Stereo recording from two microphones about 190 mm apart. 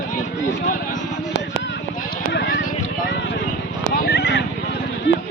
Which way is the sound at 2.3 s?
70° left (ahead or behind).